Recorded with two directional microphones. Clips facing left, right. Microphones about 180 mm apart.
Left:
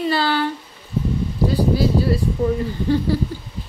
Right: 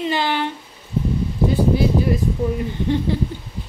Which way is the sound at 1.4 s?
20° right (ahead or behind).